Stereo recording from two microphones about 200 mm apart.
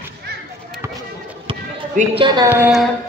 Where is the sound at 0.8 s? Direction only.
15° right (ahead or behind).